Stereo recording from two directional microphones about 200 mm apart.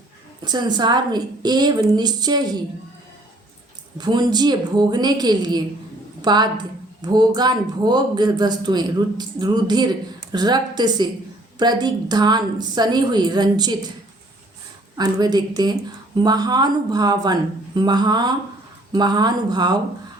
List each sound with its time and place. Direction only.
0.4 s speech: 20° right (ahead or behind)
3.9 s speech: 20° right (ahead or behind)
14.9 s speech: 20° right (ahead or behind)